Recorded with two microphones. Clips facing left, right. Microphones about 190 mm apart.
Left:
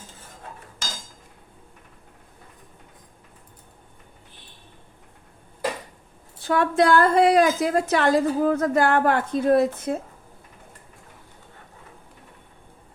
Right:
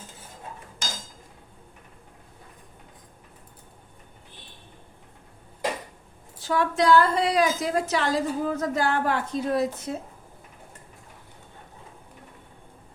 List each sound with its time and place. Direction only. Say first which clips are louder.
6.4 s a woman's voice: left 3 dB; 55° left (ahead or behind)